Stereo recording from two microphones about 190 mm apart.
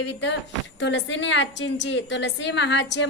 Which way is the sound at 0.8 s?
70° left (ahead or behind).